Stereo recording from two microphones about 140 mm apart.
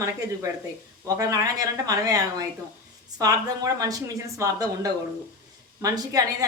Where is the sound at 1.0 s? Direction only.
25° right (ahead or behind).